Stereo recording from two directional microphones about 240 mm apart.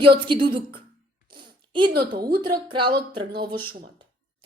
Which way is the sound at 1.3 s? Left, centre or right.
Centre.